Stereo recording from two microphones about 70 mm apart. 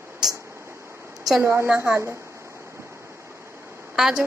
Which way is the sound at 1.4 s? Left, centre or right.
Right.